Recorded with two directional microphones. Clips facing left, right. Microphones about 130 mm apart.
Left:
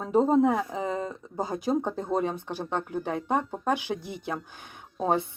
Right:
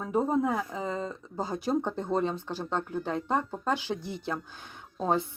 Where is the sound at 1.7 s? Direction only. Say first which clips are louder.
Left 1 dB; 5° left (ahead or behind).